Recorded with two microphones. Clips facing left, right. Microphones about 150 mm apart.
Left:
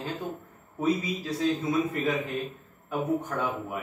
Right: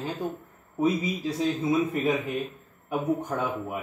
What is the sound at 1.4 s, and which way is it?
Speech, 20° right (ahead or behind).